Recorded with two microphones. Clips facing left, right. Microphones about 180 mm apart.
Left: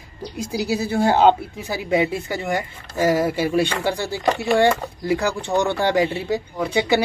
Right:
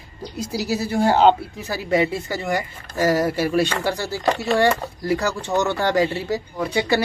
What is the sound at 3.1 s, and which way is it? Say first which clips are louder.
Speech: even; 10° left (ahead or behind).